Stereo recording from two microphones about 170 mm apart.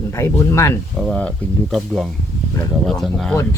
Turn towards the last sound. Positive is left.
turn(degrees=0)  # may be behind; listen again after turning